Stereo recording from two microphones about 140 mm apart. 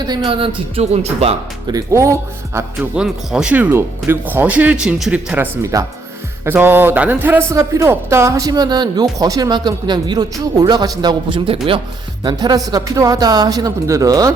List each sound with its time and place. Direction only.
0.3 s speech: 40° right (ahead or behind)
1.6 s a man's voice: 25° right (ahead or behind)
2.9 s speech: 5° right (ahead or behind)
5.7 s a man's voice: 25° right (ahead or behind)